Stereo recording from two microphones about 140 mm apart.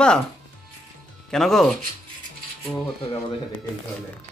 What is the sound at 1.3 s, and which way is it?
Speech, centre (ahead or behind).